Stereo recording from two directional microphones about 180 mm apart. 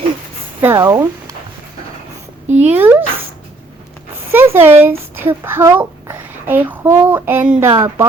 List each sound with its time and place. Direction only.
0.6 s speech: 15° right (ahead or behind)
2.6 s speech: 10° right (ahead or behind)
4.3 s a child's voice: 10° right (ahead or behind)